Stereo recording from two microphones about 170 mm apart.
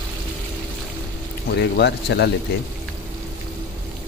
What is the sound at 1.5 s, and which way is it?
Speech, 80° left.